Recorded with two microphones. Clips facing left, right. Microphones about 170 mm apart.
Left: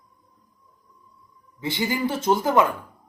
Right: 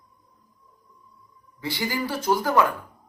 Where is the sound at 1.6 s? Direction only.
20° left (ahead or behind).